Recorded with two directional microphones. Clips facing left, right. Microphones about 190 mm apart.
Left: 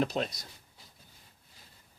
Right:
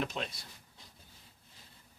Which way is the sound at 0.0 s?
40° left (ahead or behind).